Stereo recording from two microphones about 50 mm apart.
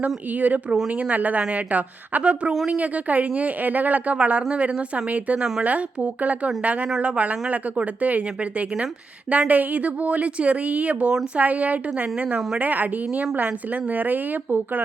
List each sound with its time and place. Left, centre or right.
0.0 s speech: right